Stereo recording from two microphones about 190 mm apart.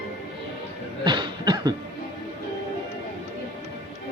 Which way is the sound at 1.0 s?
25° right (ahead or behind).